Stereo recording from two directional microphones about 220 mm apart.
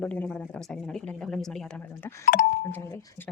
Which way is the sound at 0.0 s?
5° left (ahead or behind).